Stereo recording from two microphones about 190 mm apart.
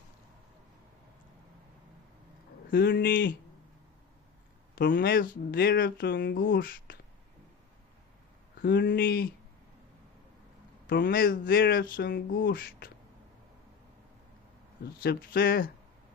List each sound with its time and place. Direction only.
2.7 s speech: 65° left (ahead or behind)
4.7 s speech: 50° left (ahead or behind)
8.6 s speech: 55° left (ahead or behind)
10.8 s speech: 50° left (ahead or behind)
15.0 s speech: 50° left (ahead or behind)